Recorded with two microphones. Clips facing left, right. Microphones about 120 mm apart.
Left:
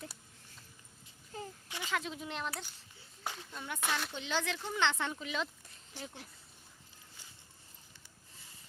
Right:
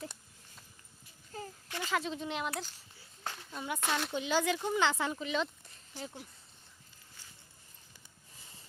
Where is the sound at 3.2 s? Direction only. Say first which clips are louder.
Even; 15° left (ahead or behind).